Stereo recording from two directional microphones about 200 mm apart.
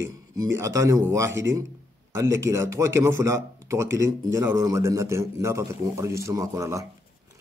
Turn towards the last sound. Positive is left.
turn(degrees=-15)  # may be behind; listen again after turning